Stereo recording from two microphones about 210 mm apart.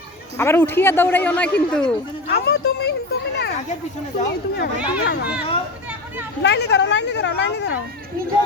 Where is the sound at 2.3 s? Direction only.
50° left (ahead or behind).